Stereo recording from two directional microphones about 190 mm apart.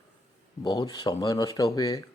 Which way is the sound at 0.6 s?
20° left (ahead or behind).